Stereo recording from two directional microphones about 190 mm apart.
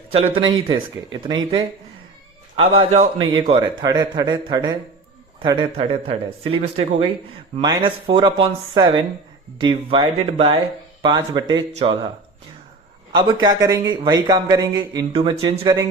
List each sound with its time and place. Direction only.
0.1 s speech: 30° right (ahead or behind)
2.6 s a man's voice: 35° right (ahead or behind)
3.2 s a man's voice: 25° right (ahead or behind)
13.1 s speech: 25° right (ahead or behind)